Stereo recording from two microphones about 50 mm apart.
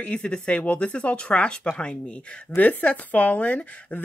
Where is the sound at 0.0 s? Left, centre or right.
Left.